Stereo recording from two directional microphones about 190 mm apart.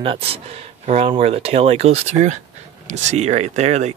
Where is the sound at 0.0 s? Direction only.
30° right (ahead or behind).